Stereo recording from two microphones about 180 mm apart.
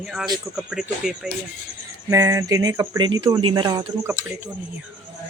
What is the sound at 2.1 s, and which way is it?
Speech, 15° right (ahead or behind).